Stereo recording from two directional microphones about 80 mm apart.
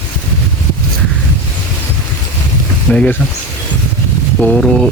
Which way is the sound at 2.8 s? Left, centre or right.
Centre.